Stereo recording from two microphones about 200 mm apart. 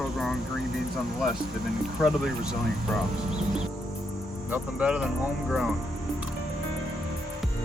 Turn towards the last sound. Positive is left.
turn(degrees=-5)  # may be behind; listen again after turning